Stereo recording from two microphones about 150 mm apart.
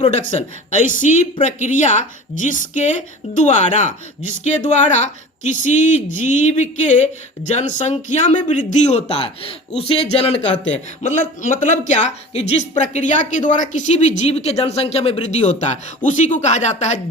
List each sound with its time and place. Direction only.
0.0 s a man's voice: 50° left (ahead or behind)
11.0 s speech: 60° left (ahead or behind)
13.1 s speech: 60° left (ahead or behind)